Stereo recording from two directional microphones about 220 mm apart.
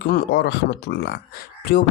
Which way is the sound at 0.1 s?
50° left (ahead or behind).